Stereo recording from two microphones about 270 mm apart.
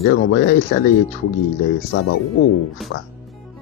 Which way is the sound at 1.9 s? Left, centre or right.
Left.